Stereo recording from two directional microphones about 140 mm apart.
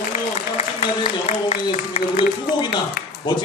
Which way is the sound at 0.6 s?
50° left (ahead or behind).